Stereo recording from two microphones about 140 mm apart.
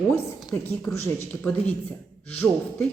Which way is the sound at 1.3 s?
10° left (ahead or behind).